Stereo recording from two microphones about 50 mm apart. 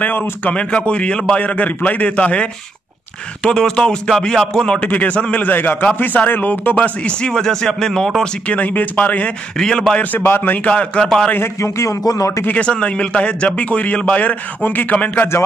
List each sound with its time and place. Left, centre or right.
0.0 s a man's voice: left
4.7 s a man's voice: left
6.7 s speech: left
8.2 s a man's voice: left
9.6 s speech: centre
10.1 s speech: left
10.6 s a man's voice: left
11.3 s speech: left
12.2 s speech: left
12.4 s a man's voice: left